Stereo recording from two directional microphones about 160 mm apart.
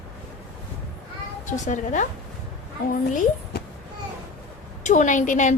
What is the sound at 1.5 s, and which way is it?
Speech, 50° left (ahead or behind).